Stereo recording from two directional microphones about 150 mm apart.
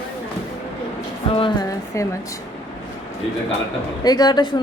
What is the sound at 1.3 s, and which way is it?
Speech, 30° left (ahead or behind).